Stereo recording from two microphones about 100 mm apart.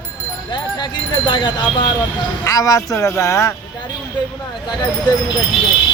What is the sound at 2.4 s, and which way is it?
Speech, 35° left (ahead or behind).